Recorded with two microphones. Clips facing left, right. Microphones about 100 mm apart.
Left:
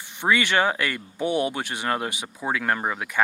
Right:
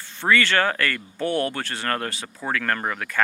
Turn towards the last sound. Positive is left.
turn(degrees=15)  # may be behind; listen again after turning